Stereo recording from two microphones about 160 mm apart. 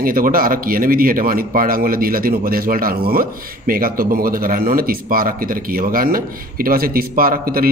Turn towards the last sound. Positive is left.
turn(degrees=-65)  # may be behind; listen again after turning